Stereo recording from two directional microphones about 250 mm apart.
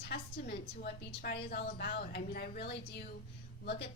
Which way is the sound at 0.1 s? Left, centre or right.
Left.